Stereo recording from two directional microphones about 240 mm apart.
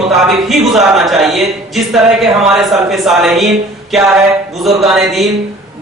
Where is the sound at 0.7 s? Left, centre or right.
Centre.